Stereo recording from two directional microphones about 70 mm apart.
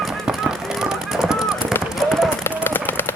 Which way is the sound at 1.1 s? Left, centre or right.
Centre.